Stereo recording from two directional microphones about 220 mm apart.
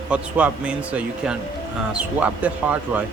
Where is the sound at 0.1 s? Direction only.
5° right (ahead or behind).